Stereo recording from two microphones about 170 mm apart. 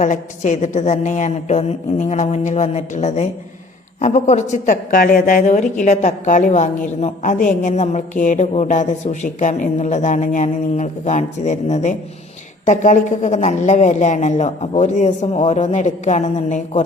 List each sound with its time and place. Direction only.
0.0 s speech: 45° left (ahead or behind)